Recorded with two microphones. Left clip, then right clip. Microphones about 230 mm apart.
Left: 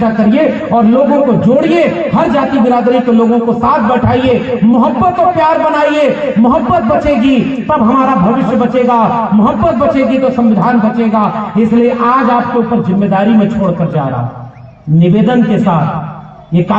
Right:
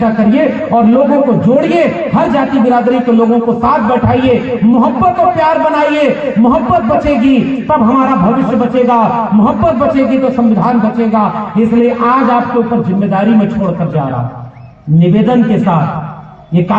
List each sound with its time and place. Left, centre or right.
0.0 s a man's voice: left
15.3 s a man's voice: left